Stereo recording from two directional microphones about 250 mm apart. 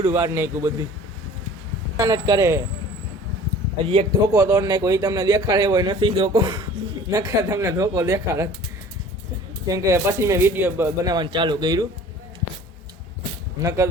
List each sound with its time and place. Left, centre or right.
0.0 s a man's voice: centre
2.0 s a man's voice: centre
3.8 s a man's voice: centre
9.6 s a man's voice: centre
13.6 s a man's voice: centre